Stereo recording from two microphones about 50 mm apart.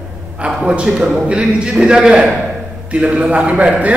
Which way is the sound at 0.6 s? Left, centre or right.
Right.